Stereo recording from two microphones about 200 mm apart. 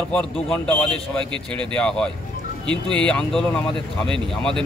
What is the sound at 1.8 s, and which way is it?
Speech, 5° left (ahead or behind).